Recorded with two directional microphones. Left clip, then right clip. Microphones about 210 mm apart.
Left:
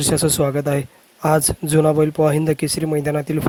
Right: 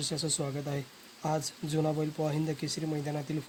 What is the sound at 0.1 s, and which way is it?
Speech, 50° left (ahead or behind).